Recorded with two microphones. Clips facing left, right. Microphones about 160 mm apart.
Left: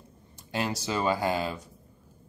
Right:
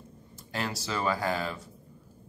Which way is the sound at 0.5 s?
20° left (ahead or behind).